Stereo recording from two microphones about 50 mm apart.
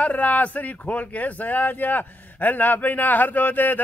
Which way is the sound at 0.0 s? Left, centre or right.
Left.